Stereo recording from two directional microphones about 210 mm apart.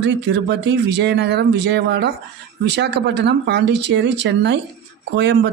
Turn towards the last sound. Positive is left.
turn(degrees=-55)  # may be behind; listen again after turning